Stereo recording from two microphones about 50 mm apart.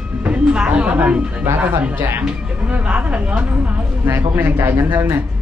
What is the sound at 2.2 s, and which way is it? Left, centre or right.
A woman's voice, right.